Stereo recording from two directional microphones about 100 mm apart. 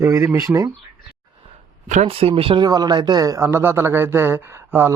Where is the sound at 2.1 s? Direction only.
75° right (ahead or behind).